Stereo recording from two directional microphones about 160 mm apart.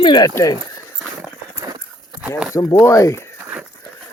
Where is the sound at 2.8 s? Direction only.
20° left (ahead or behind).